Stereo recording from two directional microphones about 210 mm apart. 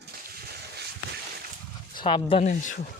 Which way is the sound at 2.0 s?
25° left (ahead or behind).